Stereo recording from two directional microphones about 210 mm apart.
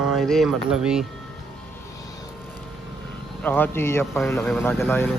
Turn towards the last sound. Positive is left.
turn(degrees=10)  # may be behind; listen again after turning